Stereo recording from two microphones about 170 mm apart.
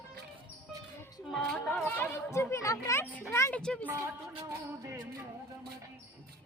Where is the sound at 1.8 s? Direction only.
15° left (ahead or behind).